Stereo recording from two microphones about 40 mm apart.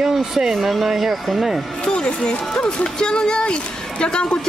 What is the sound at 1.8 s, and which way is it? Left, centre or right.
Speech, left.